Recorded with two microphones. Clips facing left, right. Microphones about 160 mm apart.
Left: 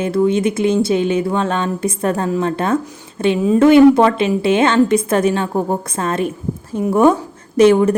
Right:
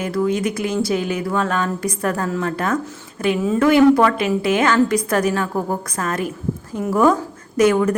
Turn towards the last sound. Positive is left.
turn(degrees=30)  # may be behind; listen again after turning